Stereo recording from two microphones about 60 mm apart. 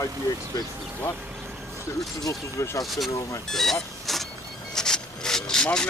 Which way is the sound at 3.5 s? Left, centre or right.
Centre.